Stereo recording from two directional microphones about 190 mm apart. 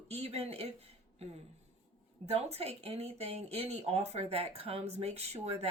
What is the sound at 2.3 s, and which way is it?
Speech, 35° right (ahead or behind).